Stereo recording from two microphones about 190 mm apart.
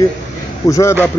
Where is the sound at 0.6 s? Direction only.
15° left (ahead or behind).